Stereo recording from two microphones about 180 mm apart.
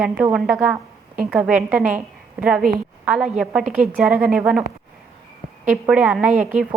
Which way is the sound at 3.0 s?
5° right (ahead or behind).